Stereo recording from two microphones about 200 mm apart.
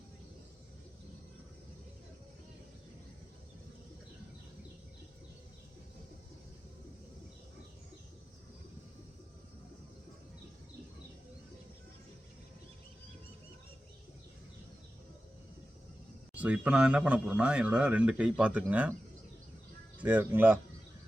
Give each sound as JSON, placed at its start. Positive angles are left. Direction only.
{"t": 16.3, "sound": "a man's voice", "side_deg": -5}
{"t": 20.0, "sound": "a man's voice", "side_deg": -10}